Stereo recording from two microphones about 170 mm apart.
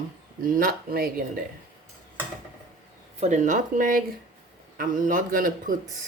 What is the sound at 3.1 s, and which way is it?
Speech, 45° right (ahead or behind).